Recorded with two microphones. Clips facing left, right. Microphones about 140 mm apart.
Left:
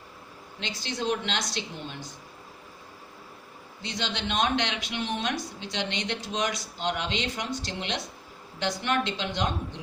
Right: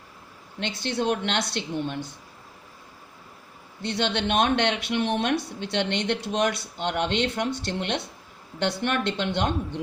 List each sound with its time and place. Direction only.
0.6 s speech: 60° right (ahead or behind)
3.8 s speech: 60° right (ahead or behind)